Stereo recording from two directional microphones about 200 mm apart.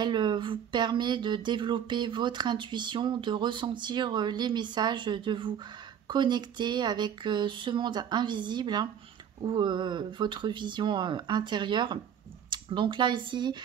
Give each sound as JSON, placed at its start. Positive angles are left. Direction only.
{"t": 0.0, "sound": "speech", "side_deg": -20}